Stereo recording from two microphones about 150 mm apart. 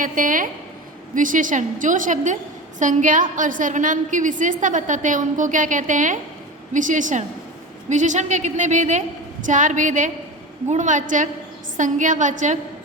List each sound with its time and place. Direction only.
0.0 s a woman's voice: 65° right (ahead or behind)